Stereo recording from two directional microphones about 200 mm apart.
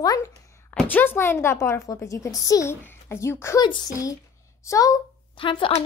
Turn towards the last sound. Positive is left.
turn(degrees=25)  # may be behind; listen again after turning